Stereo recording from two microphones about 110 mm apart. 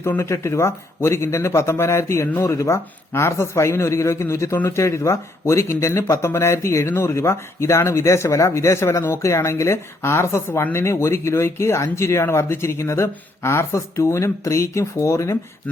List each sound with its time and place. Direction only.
0.0 s speech: 25° left (ahead or behind)